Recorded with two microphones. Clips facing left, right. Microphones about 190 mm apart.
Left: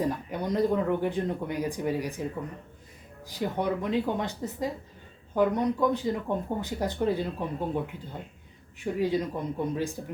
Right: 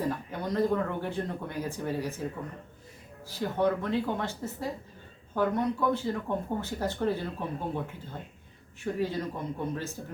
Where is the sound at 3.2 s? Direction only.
15° left (ahead or behind).